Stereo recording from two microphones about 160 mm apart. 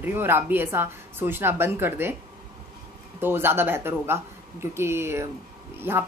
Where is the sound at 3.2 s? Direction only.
15° right (ahead or behind).